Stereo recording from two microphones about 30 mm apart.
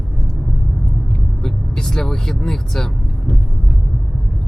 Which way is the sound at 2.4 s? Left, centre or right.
Centre.